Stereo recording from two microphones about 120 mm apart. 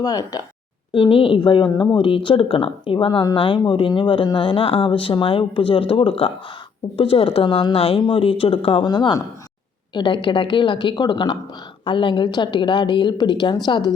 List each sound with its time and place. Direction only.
0.0 s a woman's voice: 30° left (ahead or behind)
0.9 s speech: 45° left (ahead or behind)
8.9 s a woman's voice: 35° left (ahead or behind)